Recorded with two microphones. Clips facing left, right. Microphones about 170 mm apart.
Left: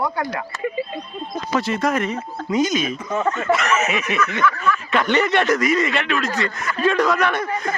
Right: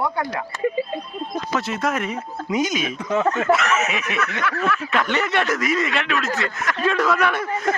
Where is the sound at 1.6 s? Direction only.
5° right (ahead or behind).